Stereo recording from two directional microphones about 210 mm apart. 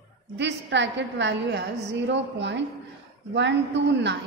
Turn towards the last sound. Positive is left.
turn(degrees=-55)  # may be behind; listen again after turning